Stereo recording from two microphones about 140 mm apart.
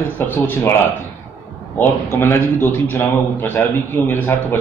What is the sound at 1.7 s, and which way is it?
A man's voice, 15° left (ahead or behind).